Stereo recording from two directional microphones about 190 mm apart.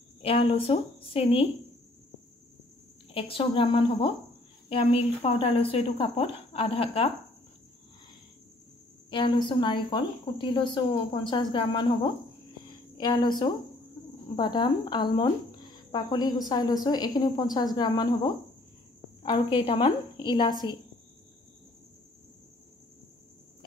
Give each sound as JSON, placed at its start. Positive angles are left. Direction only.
{"t": 0.2, "sound": "a woman's voice", "side_deg": 30}
{"t": 3.1, "sound": "a woman's voice", "side_deg": 30}
{"t": 9.1, "sound": "a woman's voice", "side_deg": 25}
{"t": 12.6, "sound": "a sound", "side_deg": 20}
{"t": 14.3, "sound": "a woman's voice", "side_deg": 25}
{"t": 19.5, "sound": "a woman's voice", "side_deg": 25}